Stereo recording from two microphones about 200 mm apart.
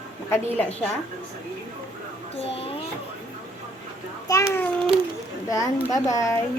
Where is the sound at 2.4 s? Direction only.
30° left (ahead or behind).